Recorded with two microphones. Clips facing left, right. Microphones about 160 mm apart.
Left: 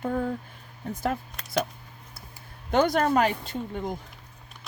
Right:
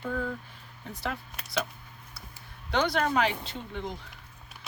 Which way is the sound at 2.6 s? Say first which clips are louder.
Left 5 dB; 45° left (ahead or behind).